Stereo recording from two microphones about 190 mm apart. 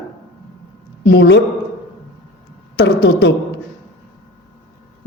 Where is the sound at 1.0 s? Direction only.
65° left (ahead or behind).